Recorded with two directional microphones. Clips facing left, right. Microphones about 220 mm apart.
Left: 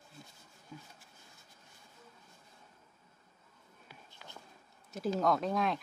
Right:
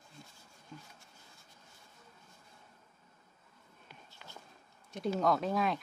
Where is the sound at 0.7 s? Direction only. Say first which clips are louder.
Left 1 dB; 5° left (ahead or behind).